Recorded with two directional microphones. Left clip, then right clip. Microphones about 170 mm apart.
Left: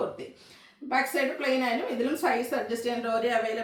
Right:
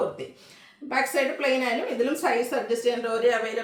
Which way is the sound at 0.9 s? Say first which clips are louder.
Right 2 dB; 20° right (ahead or behind).